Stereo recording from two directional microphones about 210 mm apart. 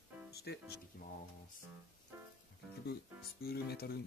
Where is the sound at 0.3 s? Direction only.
50° left (ahead or behind).